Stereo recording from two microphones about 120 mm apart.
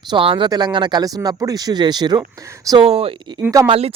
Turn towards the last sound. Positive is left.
turn(degrees=-55)  # may be behind; listen again after turning